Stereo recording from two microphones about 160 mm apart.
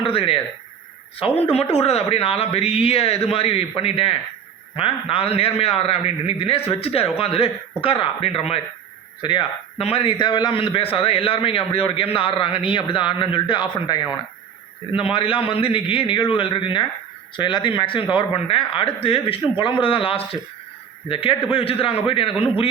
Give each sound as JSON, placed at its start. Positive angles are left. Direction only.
{"t": 0.0, "sound": "a man's voice", "side_deg": 35}